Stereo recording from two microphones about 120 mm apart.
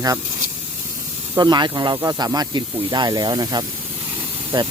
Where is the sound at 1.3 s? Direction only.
35° right (ahead or behind).